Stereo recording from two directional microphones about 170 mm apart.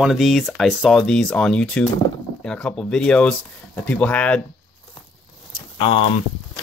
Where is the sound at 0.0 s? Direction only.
Centre (ahead or behind).